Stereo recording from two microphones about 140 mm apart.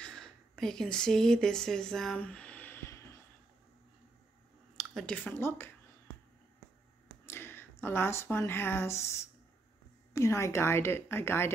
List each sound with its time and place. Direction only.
0.0 s speech: 5° left (ahead or behind)
4.7 s speech: 5° left (ahead or behind)
7.2 s a woman's voice: 15° left (ahead or behind)